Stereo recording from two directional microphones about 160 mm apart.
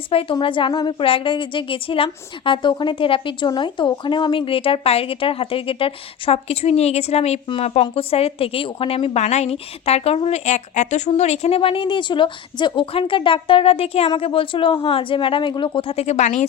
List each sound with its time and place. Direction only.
0.1 s a woman's voice: 35° left (ahead or behind)